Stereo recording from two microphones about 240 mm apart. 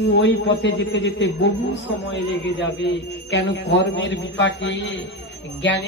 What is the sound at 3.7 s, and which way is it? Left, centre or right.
Speech, left.